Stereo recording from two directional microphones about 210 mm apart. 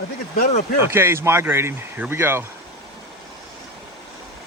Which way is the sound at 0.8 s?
10° right (ahead or behind).